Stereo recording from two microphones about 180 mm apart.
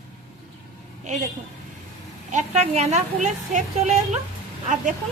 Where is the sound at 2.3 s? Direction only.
40° right (ahead or behind).